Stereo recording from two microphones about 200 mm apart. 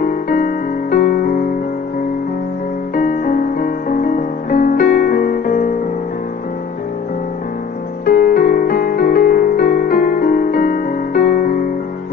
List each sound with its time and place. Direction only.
0.0 s music: 45° left (ahead or behind)
3.0 s music: 45° left (ahead or behind)
8.0 s music: 45° left (ahead or behind)